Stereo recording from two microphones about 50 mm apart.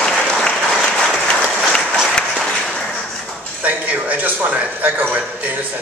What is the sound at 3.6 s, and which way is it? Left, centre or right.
Speech, right.